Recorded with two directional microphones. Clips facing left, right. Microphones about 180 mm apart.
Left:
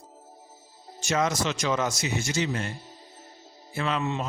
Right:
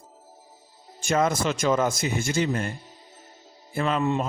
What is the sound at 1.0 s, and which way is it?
A man's voice, 50° right (ahead or behind).